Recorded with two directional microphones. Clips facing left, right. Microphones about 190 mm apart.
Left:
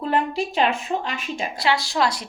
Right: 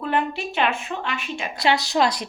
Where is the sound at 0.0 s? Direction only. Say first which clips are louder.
Left 2 dB; 35° left (ahead or behind).